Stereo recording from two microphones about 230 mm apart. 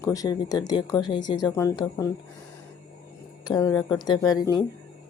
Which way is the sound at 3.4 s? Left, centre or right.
Centre.